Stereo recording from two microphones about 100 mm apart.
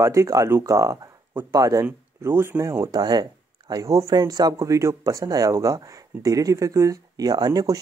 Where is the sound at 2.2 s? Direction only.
25° right (ahead or behind).